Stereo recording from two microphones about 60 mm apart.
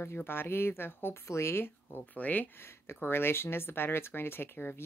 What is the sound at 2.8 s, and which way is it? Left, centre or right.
Speech, left.